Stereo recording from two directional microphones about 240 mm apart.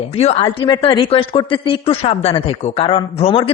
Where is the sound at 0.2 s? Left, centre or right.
Left.